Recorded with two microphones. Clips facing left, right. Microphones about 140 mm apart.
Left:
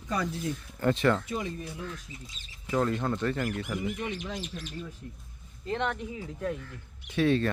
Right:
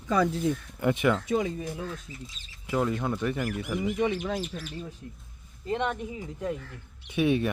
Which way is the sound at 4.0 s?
60° right (ahead or behind).